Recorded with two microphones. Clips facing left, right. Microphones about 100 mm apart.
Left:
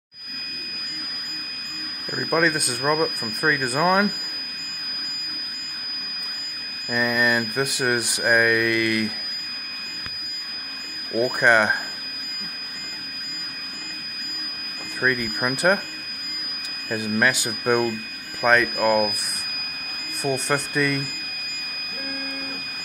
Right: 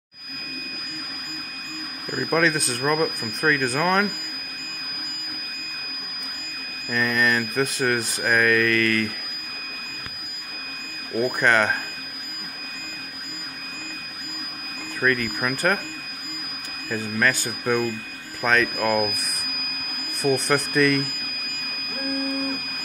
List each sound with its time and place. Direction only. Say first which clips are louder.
2.0 s speech: even; 10° left (ahead or behind)
6.9 s speech: left 1 dB; 10° left (ahead or behind)
11.1 s speech: left 2 dB; 10° left (ahead or behind)
15.0 s speech: right 1 dB; 15° left (ahead or behind)
16.9 s speech: left 1 dB; 15° left (ahead or behind)
20.2 s speech: right 3 dB; 15° right (ahead or behind)
20.4 s speech: right 3 dB; 15° left (ahead or behind)